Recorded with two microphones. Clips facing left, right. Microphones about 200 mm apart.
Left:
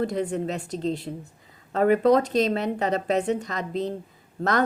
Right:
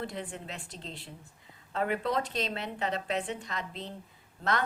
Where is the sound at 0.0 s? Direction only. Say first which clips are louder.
Left 12 dB; 40° left (ahead or behind).